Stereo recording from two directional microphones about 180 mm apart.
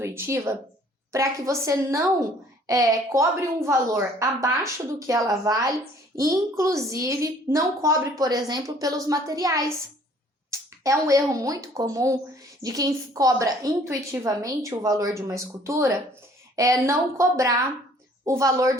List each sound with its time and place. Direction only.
0.0 s a woman's voice: 15° right (ahead or behind)